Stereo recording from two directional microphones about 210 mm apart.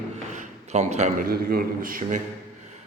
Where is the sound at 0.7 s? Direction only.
30° right (ahead or behind).